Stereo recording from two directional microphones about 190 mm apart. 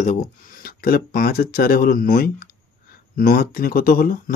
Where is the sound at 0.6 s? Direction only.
50° left (ahead or behind).